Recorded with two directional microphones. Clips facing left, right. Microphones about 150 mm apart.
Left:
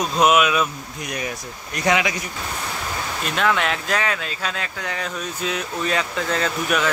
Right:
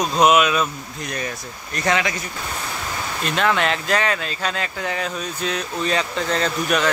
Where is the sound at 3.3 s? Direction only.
Centre (ahead or behind).